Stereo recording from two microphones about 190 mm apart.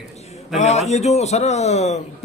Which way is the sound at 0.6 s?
35° left (ahead or behind).